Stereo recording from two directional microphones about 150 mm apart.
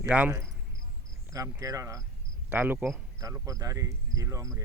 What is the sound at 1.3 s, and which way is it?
Speech, 25° right (ahead or behind).